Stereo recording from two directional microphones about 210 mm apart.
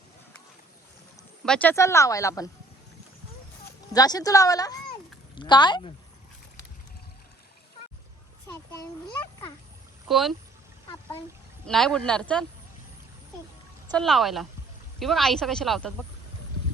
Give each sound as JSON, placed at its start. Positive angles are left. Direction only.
{"t": 1.5, "sound": "a woman's voice", "side_deg": 5}
{"t": 3.9, "sound": "a woman's voice", "side_deg": 15}
{"t": 8.8, "sound": "speech", "side_deg": 20}
{"t": 10.1, "sound": "speech", "side_deg": 0}
{"t": 11.6, "sound": "speech", "side_deg": 0}
{"t": 13.9, "sound": "speech", "side_deg": 0}